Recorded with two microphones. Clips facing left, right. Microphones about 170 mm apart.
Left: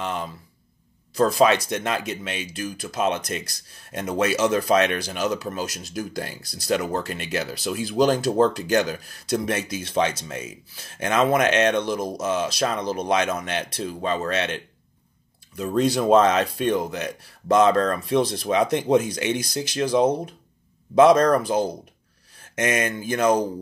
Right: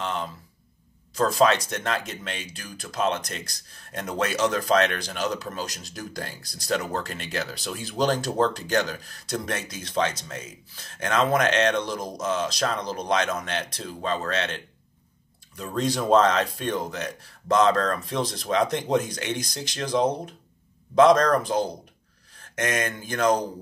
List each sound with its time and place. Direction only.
0.0 s a sound: 10° left (ahead or behind)
1.1 s speech: 10° left (ahead or behind)
15.7 s speech: 5° left (ahead or behind)